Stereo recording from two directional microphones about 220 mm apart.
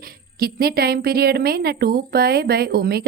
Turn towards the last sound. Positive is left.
turn(degrees=-45)  # may be behind; listen again after turning